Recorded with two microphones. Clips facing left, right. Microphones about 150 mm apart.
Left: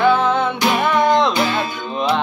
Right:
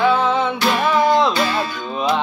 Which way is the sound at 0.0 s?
Centre (ahead or behind).